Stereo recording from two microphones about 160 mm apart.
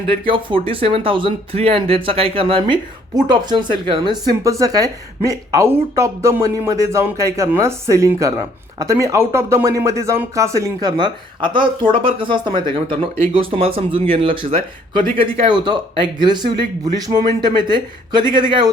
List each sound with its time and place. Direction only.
0.3 s speech: 35° right (ahead or behind)